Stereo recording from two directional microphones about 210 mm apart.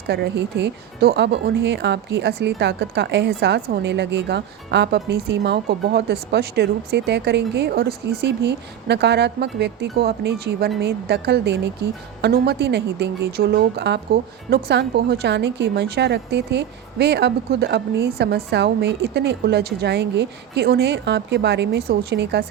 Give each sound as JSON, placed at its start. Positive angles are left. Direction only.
{"t": 0.1, "sound": "speech", "side_deg": -55}